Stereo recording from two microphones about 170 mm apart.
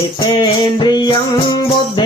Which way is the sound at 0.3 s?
25° left (ahead or behind).